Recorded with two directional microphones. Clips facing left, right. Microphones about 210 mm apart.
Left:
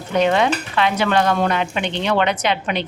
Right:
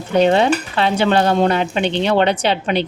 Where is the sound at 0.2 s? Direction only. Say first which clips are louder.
Right 3 dB; 30° right (ahead or behind).